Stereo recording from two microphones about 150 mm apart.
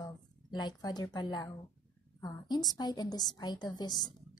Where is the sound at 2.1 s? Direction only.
25° left (ahead or behind).